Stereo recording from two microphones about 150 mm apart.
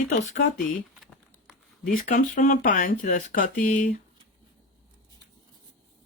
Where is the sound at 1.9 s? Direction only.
70° left (ahead or behind).